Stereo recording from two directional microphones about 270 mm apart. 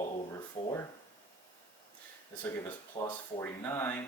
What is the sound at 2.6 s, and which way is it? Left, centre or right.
Speech, centre.